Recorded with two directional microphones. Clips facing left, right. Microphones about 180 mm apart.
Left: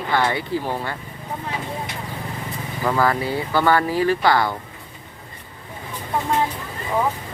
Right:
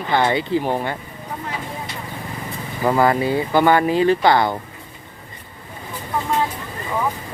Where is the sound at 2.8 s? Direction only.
25° right (ahead or behind).